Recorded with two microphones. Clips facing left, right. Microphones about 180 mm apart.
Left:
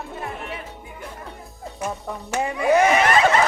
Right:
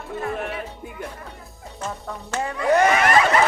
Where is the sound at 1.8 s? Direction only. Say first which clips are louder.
Left 2 dB; 15° left (ahead or behind).